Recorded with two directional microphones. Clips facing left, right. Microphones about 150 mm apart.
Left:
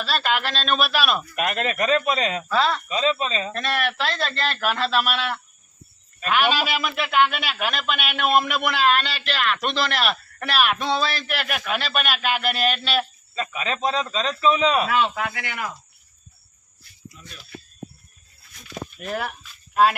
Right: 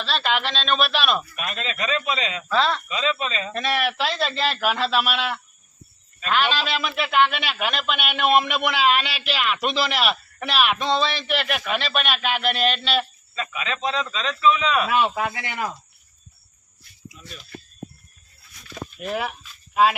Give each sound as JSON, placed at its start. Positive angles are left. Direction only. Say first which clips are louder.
{"t": 0.0, "sound": "a man's voice", "louder": "even", "side_deg": 5}
{"t": 1.4, "sound": "speech", "louder": "left 5 dB", "side_deg": 60}
{"t": 2.5, "sound": "a man's voice", "louder": "right 2 dB", "side_deg": 5}
{"t": 2.9, "sound": "speech", "louder": "left 3 dB", "side_deg": 35}
{"t": 3.5, "sound": "a man's voice", "louder": "right 1 dB", "side_deg": 0}
{"t": 13.3, "sound": "speech", "louder": "left 2 dB", "side_deg": 40}
{"t": 14.8, "sound": "speech", "louder": "right 1 dB", "side_deg": -15}
{"t": 17.2, "sound": "a man's voice", "louder": "right 5 dB", "side_deg": -5}
{"t": 18.9, "sound": "speech", "louder": "right 2 dB", "side_deg": 0}